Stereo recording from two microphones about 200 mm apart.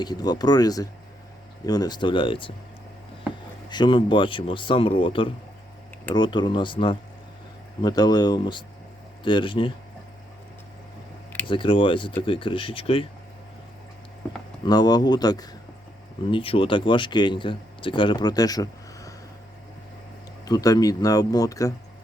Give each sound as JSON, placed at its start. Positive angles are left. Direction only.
{"t": 0.0, "sound": "speech", "side_deg": 20}
{"t": 3.7, "sound": "speech", "side_deg": 20}
{"t": 11.4, "sound": "speech", "side_deg": 25}
{"t": 14.6, "sound": "speech", "side_deg": 20}
{"t": 20.4, "sound": "speech", "side_deg": 20}